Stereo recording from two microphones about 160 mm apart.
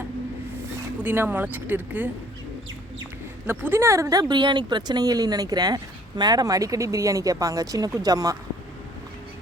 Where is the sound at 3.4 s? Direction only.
15° right (ahead or behind).